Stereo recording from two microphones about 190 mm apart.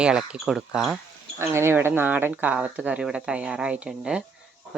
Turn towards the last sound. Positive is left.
turn(degrees=-5)  # may be behind; listen again after turning